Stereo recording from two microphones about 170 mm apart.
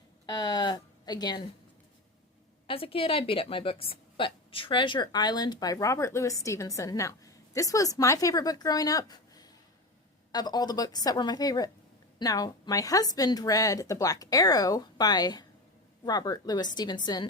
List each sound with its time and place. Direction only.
0.3 s a woman's voice: 25° left (ahead or behind)
2.6 s a woman's voice: 35° left (ahead or behind)